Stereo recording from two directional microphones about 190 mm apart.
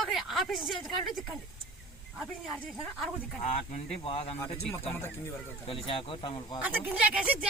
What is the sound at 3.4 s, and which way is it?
Speech, 35° left (ahead or behind).